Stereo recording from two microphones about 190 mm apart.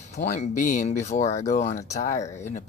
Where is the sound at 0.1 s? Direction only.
40° left (ahead or behind).